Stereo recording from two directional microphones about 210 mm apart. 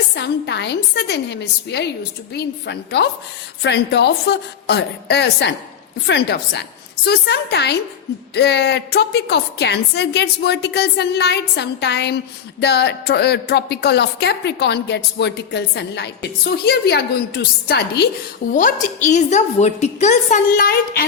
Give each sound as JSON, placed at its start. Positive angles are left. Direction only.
{"t": 0.1, "sound": "a woman's voice", "side_deg": 55}
{"t": 18.5, "sound": "a woman's voice", "side_deg": 35}